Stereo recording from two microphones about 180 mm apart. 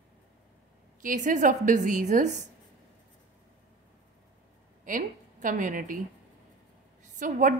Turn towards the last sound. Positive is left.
turn(degrees=-45)  # may be behind; listen again after turning